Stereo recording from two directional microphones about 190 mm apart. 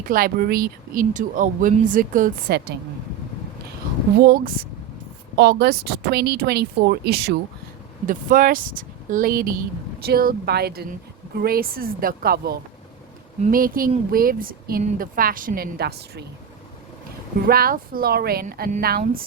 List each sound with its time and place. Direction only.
0.0 s speech: 50° right (ahead or behind)
4.2 s speech: 55° right (ahead or behind)
8.0 s speech: 45° right (ahead or behind)
17.4 s speech: 50° right (ahead or behind)